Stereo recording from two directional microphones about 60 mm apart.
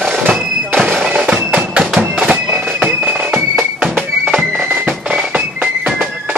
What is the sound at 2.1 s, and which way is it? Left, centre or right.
Bagpipes, right.